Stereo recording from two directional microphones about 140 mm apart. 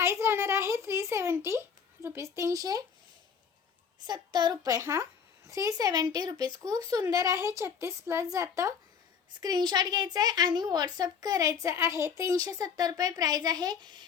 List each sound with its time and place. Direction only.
0.0 s a child's voice: 20° right (ahead or behind)
4.0 s a woman's voice: 30° right (ahead or behind)